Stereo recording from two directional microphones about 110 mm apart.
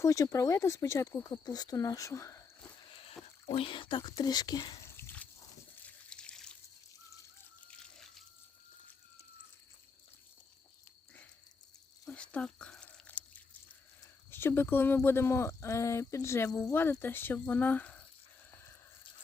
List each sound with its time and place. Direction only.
0.0 s speech: 30° left (ahead or behind)
2.8 s a sound: 55° left (ahead or behind)
3.5 s speech: 55° left (ahead or behind)
4.9 s dog: 20° left (ahead or behind)
5.8 s water: 10° left (ahead or behind)
7.7 s water: 5° left (ahead or behind)
12.0 s chewing: 10° left (ahead or behind)
14.3 s speech: 20° left (ahead or behind)